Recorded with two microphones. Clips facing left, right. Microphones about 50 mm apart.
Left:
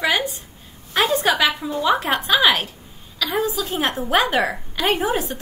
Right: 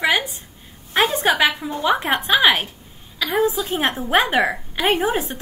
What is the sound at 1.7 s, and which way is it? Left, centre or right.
Speech, right.